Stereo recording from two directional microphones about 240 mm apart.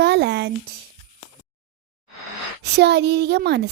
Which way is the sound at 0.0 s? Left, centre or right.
Right.